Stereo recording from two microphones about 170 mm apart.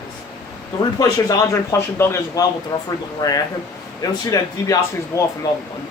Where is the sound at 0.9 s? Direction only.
20° left (ahead or behind).